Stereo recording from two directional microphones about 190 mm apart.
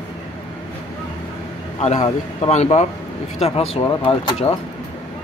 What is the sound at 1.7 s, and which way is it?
Speech, 35° left (ahead or behind).